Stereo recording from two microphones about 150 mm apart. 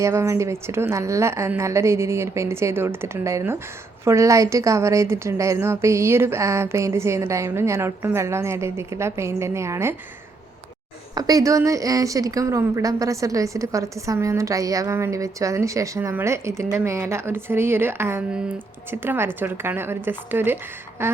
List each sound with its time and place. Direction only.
0.0 s a woman's voice: 20° right (ahead or behind)
11.1 s a woman's voice: 25° right (ahead or behind)